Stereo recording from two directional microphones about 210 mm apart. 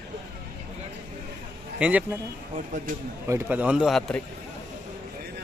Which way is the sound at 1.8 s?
5° right (ahead or behind).